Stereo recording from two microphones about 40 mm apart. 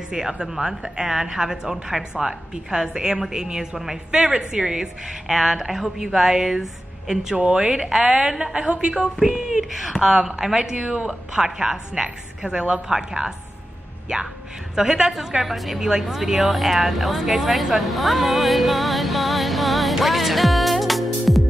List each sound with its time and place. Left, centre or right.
0.1 s a woman's voice: centre
10.8 s a woman's voice: right
11.3 s a woman's voice: centre
14.8 s speech: centre